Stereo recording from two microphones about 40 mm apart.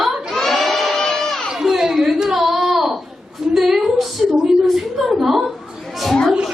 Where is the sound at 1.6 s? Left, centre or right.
Centre.